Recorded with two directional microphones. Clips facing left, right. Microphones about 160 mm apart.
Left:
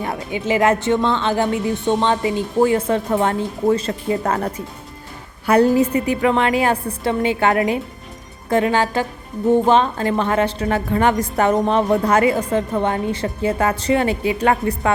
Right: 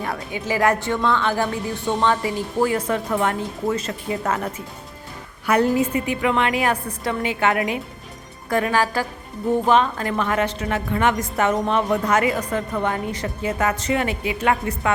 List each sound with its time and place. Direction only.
0.0 s speech: 20° left (ahead or behind)
5.5 s a woman's voice: 35° left (ahead or behind)